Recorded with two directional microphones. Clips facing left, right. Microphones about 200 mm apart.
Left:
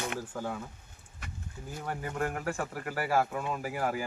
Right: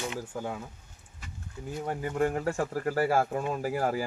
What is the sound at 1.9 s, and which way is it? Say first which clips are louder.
Speech: right 5 dB; 25° right (ahead or behind).